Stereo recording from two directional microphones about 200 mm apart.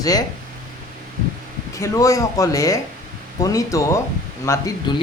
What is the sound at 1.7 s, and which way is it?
Speech, 15° left (ahead or behind).